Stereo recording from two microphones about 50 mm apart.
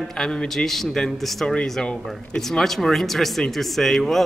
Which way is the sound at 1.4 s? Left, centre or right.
Centre.